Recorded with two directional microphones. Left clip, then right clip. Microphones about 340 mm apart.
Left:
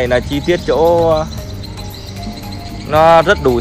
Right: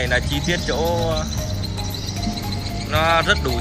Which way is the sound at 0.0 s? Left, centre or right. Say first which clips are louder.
Left 7 dB; centre.